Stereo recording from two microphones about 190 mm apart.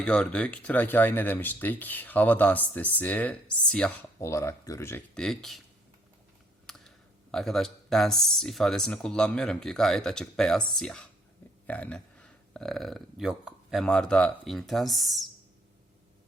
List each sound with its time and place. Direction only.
0.0 s speech: 5° left (ahead or behind)
6.7 s speech: centre (ahead or behind)